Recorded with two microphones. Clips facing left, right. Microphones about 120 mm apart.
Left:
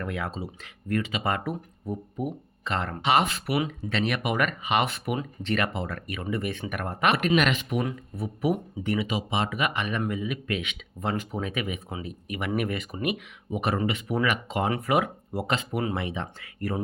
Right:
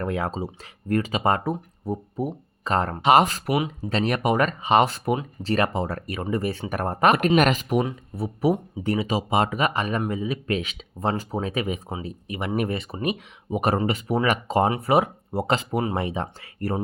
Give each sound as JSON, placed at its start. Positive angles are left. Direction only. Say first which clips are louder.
{"t": 0.0, "sound": "speech", "louder": "right 5 dB", "side_deg": -35}
{"t": 3.5, "sound": "speech", "louder": "right 2 dB", "side_deg": -25}
{"t": 3.8, "sound": "speech", "louder": "right 4 dB", "side_deg": -40}